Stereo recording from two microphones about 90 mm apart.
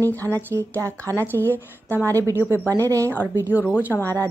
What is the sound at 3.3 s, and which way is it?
Speech, 20° right (ahead or behind).